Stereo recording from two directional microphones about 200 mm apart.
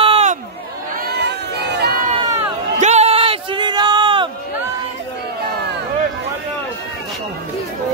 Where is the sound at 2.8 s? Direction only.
35° right (ahead or behind).